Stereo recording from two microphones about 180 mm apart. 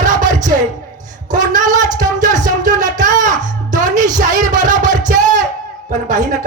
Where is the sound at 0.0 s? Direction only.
45° right (ahead or behind).